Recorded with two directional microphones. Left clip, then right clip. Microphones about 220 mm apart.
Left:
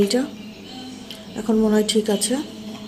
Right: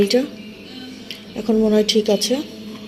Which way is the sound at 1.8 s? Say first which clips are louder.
Right 3 dB; 40° left (ahead or behind).